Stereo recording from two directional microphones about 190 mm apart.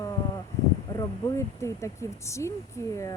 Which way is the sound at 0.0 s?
20° left (ahead or behind).